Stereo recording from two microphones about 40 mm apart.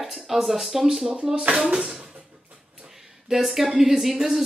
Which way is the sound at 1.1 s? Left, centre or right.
Right.